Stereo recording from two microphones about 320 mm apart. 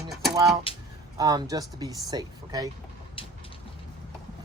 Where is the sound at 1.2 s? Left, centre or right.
Centre.